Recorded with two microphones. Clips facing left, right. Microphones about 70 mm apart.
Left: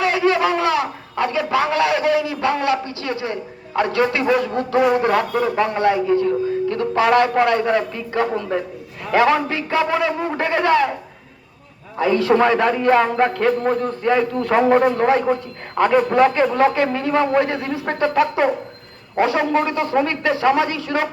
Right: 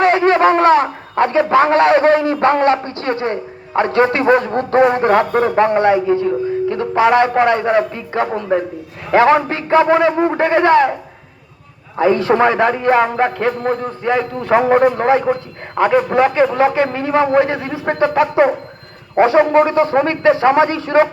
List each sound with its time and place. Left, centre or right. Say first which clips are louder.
0.0 s a man's voice: right 6 dB; right
11.9 s a man's voice: right 3 dB; right